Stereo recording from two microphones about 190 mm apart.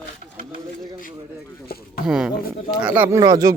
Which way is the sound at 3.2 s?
20° right (ahead or behind).